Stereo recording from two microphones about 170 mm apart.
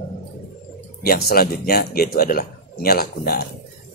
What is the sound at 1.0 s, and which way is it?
Speech, 60° left (ahead or behind).